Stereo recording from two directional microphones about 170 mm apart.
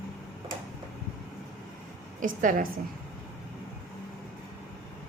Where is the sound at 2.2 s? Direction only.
50° right (ahead or behind).